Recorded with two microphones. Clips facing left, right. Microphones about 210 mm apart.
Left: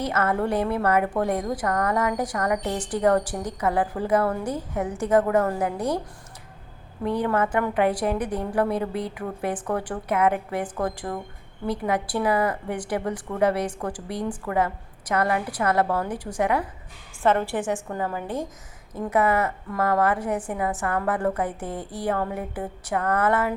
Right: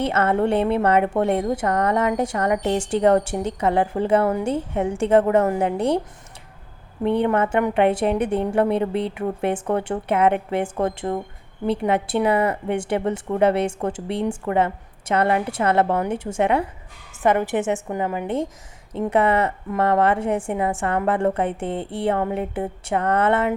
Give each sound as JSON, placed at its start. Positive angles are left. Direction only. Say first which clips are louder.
{"t": 0.0, "sound": "a woman's voice", "louder": "right 4 dB", "side_deg": -25}
{"t": 7.0, "sound": "a woman's voice", "louder": "right 4 dB", "side_deg": -25}